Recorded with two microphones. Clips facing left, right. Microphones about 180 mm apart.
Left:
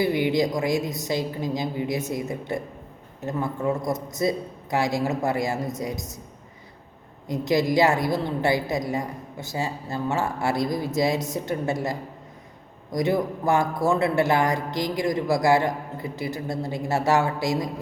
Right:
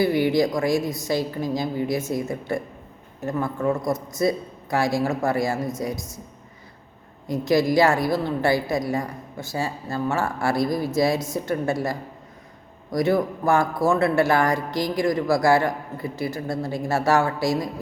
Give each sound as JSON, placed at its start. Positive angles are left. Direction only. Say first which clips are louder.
{"t": 0.0, "sound": "a woman's voice", "louder": "right 2 dB", "side_deg": 20}
{"t": 7.4, "sound": "a woman's voice", "louder": "right 2 dB", "side_deg": 20}